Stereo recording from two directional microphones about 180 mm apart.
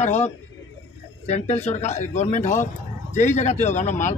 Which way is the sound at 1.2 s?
40° left (ahead or behind).